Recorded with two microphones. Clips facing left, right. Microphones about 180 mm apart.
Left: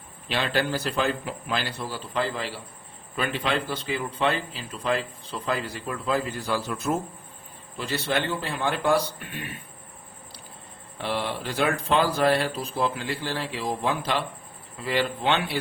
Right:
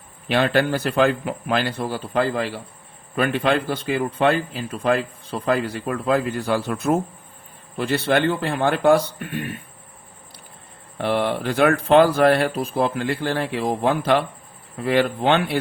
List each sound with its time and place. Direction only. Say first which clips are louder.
0.3 s a man's voice: right 7 dB; 55° right (ahead or behind)
10.9 s a man's voice: right 7 dB; 55° right (ahead or behind)